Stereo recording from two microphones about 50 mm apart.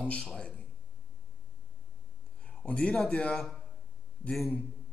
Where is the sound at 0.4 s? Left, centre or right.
Centre.